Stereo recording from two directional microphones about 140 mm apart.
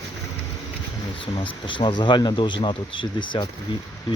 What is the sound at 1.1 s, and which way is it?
Speech, 40° left (ahead or behind).